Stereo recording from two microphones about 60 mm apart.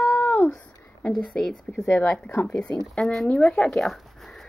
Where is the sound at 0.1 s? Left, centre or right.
Left.